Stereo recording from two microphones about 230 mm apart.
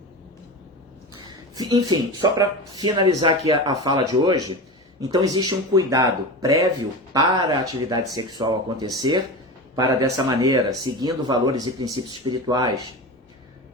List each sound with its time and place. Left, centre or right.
1.5 s speech: centre